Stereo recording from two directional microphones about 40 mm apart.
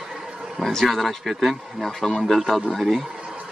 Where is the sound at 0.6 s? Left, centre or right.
Centre.